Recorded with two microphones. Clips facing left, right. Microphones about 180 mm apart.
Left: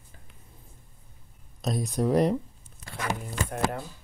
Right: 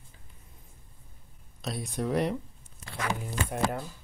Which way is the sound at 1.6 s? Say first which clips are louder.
Left 5 dB; 40° left (ahead or behind).